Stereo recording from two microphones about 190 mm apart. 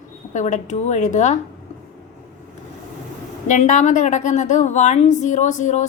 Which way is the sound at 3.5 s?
40° left (ahead or behind).